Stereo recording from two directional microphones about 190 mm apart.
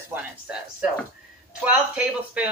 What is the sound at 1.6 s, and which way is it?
Speech, 5° right (ahead or behind).